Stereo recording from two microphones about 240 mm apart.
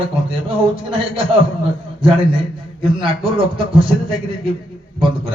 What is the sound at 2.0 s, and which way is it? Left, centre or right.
A man's voice, right.